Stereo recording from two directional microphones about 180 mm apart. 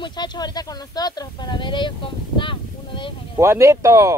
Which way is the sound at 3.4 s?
15° right (ahead or behind).